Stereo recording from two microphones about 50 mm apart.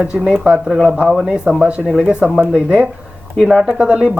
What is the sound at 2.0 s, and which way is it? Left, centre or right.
Speech, right.